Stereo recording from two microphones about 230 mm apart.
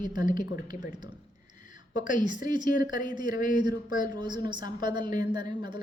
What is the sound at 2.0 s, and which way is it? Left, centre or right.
Speech, left.